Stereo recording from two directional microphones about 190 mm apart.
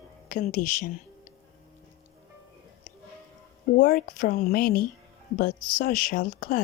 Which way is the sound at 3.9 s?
45° left (ahead or behind).